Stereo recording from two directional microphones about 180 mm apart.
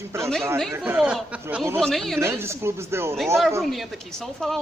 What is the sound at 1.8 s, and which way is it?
Speech, centre (ahead or behind).